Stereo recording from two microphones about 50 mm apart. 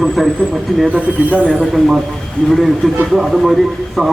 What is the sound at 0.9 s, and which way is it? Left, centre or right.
Speech, right.